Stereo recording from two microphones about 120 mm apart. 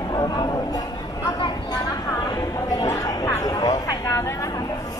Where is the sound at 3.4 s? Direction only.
30° left (ahead or behind).